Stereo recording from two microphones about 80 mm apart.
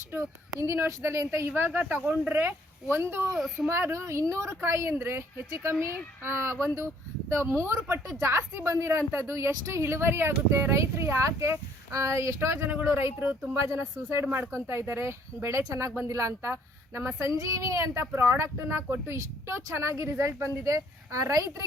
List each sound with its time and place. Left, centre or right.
0.6 s a woman's voice: right
3.3 s a child's voice: centre
3.7 s a woman's voice: right